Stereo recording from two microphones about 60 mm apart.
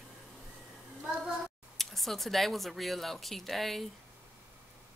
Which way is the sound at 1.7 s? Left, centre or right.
Centre.